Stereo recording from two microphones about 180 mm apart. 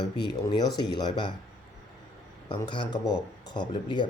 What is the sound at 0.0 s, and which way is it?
Speech, 20° left (ahead or behind).